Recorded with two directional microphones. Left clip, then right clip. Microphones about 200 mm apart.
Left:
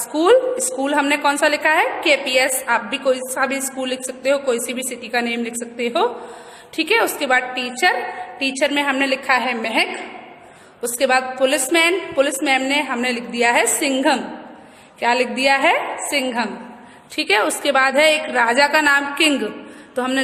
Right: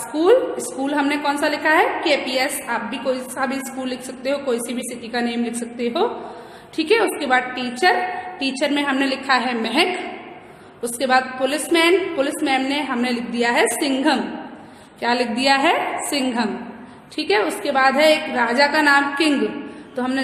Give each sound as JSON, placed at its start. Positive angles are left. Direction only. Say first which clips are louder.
{"t": 0.1, "sound": "a woman's voice", "louder": "left 2 dB", "side_deg": 35}
{"t": 10.9, "sound": "a woman's voice", "louder": "left 1 dB", "side_deg": 35}
{"t": 17.2, "sound": "a woman's voice", "louder": "left 2 dB", "side_deg": 35}